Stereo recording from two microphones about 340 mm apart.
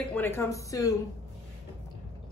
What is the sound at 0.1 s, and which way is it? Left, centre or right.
Speech, centre.